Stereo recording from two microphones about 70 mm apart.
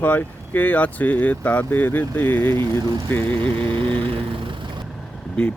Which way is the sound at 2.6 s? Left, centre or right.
Right.